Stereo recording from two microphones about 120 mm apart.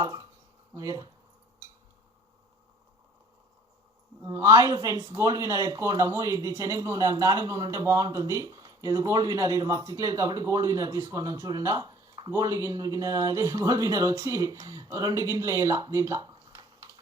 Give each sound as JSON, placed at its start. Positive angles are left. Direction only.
{"t": 0.0, "sound": "speech", "side_deg": -30}
{"t": 4.2, "sound": "speech", "side_deg": -25}